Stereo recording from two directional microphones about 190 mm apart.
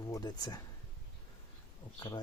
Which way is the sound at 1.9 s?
20° left (ahead or behind).